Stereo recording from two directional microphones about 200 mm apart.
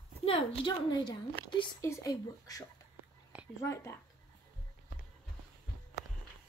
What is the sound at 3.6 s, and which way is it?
Speech, 15° left (ahead or behind).